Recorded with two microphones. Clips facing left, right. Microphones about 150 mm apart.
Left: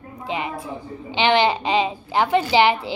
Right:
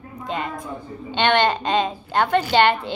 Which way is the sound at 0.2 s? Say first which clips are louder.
Left 1 dB; 10° left (ahead or behind).